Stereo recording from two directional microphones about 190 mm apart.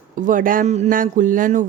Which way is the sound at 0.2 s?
45° right (ahead or behind).